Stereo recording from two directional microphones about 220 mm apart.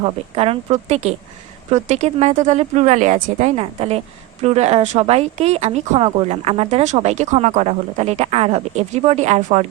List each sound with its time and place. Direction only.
0.0 s speech: 25° right (ahead or behind)